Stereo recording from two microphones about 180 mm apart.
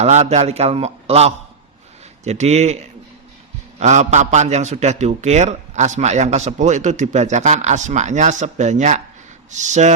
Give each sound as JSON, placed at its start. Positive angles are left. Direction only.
{"t": 0.0, "sound": "a man's voice", "side_deg": -40}
{"t": 3.8, "sound": "a man's voice", "side_deg": -40}